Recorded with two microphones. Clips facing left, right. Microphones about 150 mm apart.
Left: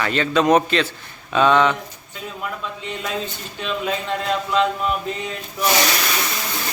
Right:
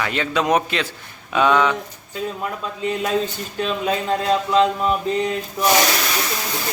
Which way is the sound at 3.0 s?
40° right (ahead or behind).